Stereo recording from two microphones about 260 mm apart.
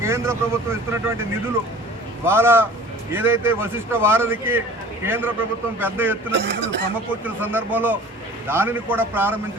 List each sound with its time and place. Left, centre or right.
0.0 s speech: centre
2.2 s speech: centre
6.3 s speech: right
7.3 s speech: centre